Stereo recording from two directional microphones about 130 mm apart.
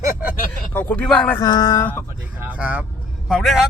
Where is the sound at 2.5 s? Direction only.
10° right (ahead or behind).